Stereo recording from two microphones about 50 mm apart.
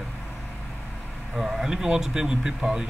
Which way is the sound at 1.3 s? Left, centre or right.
Centre.